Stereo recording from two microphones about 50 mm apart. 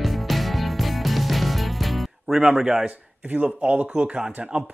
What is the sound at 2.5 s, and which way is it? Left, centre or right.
Speech, centre.